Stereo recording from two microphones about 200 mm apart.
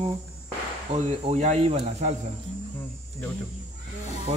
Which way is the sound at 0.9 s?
35° right (ahead or behind).